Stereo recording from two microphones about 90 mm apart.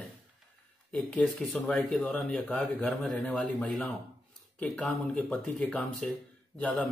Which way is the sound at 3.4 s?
15° left (ahead or behind).